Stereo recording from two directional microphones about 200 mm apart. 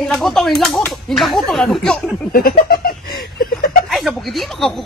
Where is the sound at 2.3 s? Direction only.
45° left (ahead or behind).